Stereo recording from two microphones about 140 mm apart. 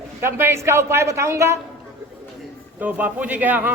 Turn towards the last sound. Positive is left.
turn(degrees=-15)  # may be behind; listen again after turning